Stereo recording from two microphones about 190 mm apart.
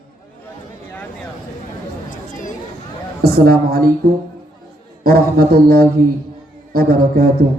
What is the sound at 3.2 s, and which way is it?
Speech, 50° right (ahead or behind).